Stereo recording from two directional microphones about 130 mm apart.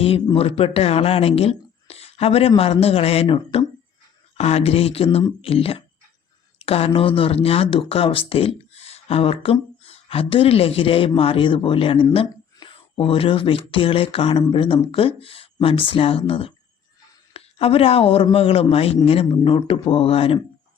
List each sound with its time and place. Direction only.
0.3 s speech: 50° left (ahead or behind)
3.5 s a sound: 50° left (ahead or behind)
4.4 s speech: 55° left (ahead or behind)